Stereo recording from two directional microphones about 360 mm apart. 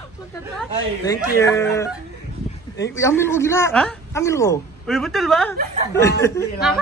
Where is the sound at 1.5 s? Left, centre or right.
Centre.